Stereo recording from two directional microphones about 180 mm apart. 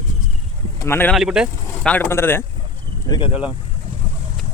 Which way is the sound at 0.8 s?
15° left (ahead or behind).